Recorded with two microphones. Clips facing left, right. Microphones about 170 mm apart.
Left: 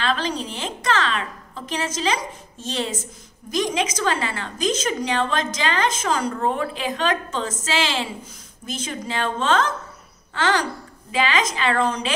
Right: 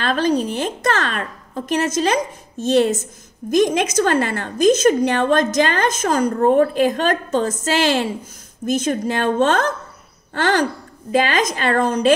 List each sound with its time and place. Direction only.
0.0 s a woman's voice: 50° right (ahead or behind)